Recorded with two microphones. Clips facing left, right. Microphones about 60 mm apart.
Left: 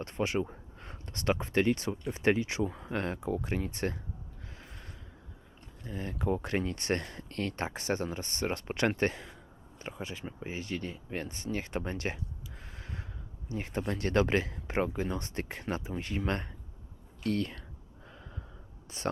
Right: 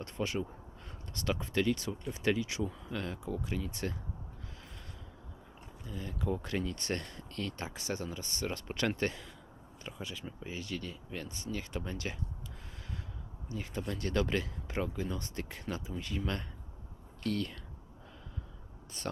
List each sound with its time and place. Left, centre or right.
0.0 s speech: left
5.8 s speech: left
12.7 s a sound: left
13.5 s speech: left